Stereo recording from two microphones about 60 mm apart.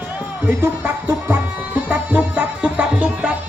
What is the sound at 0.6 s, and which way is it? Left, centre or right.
Music, right.